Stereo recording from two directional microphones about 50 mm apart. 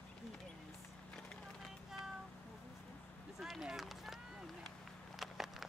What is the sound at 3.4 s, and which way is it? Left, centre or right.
Run, centre.